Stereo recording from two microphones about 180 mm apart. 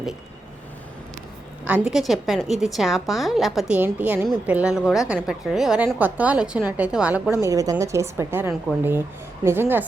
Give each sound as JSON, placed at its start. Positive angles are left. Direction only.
{"t": 1.6, "sound": "a woman's voice", "side_deg": -5}